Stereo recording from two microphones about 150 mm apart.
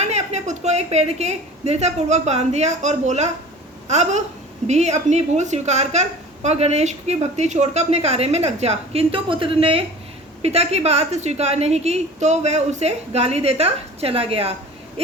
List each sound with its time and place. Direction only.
0.0 s a woman's voice: 45° right (ahead or behind)